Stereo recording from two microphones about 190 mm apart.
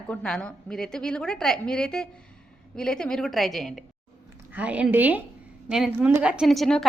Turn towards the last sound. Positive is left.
turn(degrees=0)  # may be behind; listen again after turning